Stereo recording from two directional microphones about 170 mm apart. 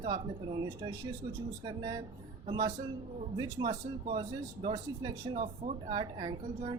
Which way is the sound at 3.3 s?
20° right (ahead or behind).